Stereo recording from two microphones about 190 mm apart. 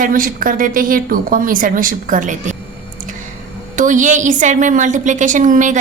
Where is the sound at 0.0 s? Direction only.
45° right (ahead or behind).